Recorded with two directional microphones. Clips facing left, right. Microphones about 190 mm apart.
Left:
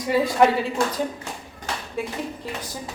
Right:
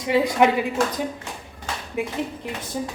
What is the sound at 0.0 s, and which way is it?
Speech, 20° right (ahead or behind).